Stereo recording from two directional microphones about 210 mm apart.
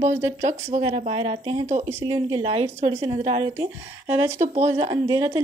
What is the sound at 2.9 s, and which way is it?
Speech, 15° right (ahead or behind).